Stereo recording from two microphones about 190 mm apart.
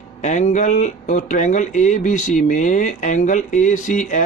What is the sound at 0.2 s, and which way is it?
A man's voice, 40° left (ahead or behind).